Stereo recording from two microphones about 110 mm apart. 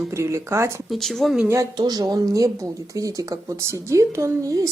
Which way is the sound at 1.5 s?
35° right (ahead or behind).